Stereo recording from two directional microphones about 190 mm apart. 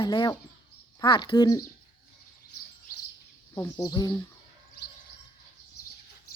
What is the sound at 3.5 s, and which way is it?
Speech, 15° left (ahead or behind).